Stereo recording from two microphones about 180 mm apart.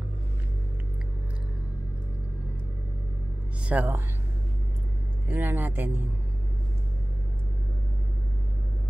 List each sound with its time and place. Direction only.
3.6 s speech: 10° right (ahead or behind)
5.3 s speech: 10° right (ahead or behind)